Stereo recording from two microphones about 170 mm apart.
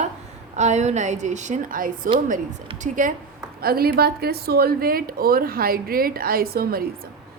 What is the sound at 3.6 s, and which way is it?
Speech, 65° right (ahead or behind).